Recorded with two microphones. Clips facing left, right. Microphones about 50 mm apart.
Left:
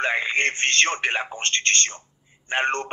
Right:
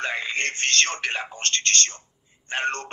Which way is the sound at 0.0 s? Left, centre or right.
Left.